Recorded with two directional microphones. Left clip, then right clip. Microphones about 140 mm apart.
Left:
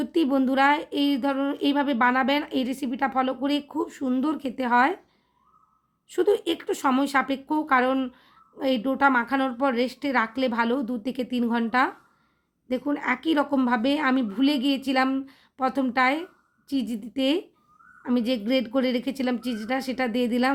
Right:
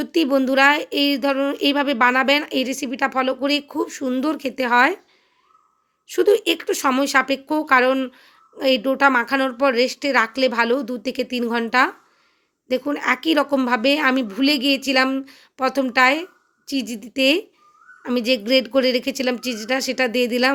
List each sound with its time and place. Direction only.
0.0 s speech: 15° right (ahead or behind)
6.1 s a woman's voice: 20° right (ahead or behind)